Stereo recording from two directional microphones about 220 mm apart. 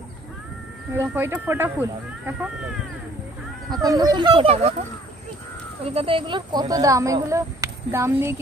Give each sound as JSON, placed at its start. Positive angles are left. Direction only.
{"t": 0.9, "sound": "speech", "side_deg": -10}
{"t": 3.8, "sound": "speech", "side_deg": -15}
{"t": 5.9, "sound": "speech", "side_deg": -25}